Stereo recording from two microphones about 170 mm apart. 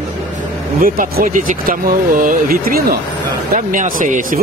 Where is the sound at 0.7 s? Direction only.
55° right (ahead or behind).